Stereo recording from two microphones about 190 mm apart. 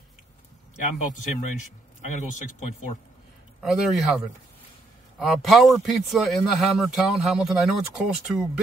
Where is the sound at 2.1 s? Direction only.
40° left (ahead or behind).